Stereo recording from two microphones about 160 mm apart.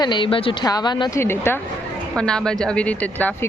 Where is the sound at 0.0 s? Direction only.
30° left (ahead or behind).